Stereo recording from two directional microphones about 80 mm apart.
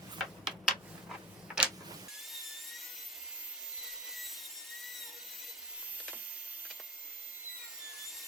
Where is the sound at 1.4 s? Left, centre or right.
Centre.